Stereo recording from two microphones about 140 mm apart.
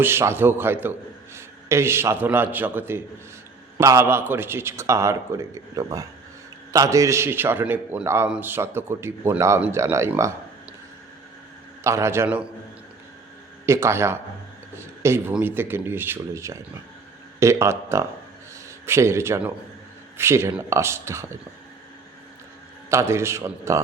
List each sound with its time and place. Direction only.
0.0 s a man's voice: 15° right (ahead or behind)
11.8 s a man's voice: 20° right (ahead or behind)
13.7 s a man's voice: 20° right (ahead or behind)
22.9 s a man's voice: 20° right (ahead or behind)